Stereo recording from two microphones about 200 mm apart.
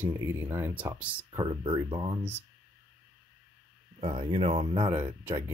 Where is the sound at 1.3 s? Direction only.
25° right (ahead or behind).